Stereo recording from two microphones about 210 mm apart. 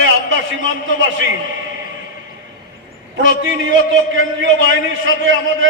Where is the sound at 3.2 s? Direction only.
65° right (ahead or behind).